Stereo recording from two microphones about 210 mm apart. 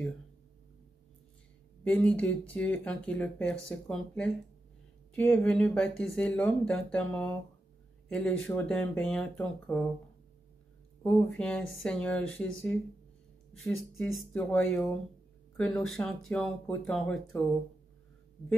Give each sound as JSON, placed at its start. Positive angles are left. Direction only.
{"t": 1.9, "sound": "speech", "side_deg": 5}
{"t": 11.0, "sound": "speech", "side_deg": 5}